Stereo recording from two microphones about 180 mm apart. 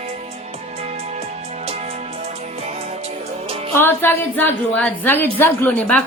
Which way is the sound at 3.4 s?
35° right (ahead or behind).